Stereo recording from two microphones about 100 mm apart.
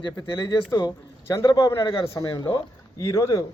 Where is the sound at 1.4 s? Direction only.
40° left (ahead or behind).